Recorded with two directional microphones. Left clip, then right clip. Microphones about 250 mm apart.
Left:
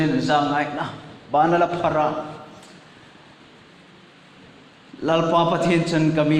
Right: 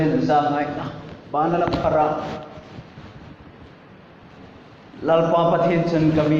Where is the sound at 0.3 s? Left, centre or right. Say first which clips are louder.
Even; left.